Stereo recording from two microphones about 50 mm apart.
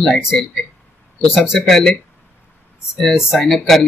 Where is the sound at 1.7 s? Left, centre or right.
Centre.